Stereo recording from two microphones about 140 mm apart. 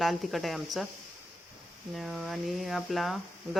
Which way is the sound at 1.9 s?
Centre (ahead or behind).